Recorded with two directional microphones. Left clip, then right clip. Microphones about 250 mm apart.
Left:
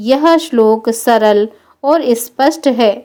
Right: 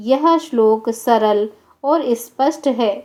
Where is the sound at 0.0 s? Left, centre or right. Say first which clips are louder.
Left 4 dB; left.